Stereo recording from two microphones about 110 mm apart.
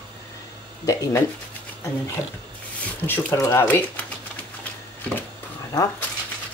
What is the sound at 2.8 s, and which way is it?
Speech, 20° left (ahead or behind).